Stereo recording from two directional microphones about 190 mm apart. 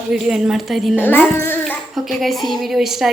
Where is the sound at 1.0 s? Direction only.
10° left (ahead or behind).